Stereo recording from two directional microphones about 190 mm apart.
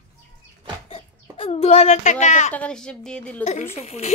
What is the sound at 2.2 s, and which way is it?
Speech, 40° left (ahead or behind).